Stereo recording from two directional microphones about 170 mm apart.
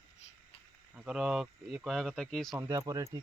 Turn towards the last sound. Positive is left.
turn(degrees=-20)  # may be behind; listen again after turning